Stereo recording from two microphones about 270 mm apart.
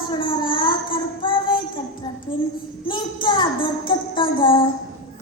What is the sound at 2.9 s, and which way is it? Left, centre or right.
Child singing, centre.